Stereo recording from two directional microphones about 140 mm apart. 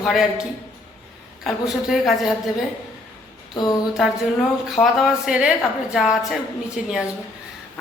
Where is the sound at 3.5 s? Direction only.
30° left (ahead or behind).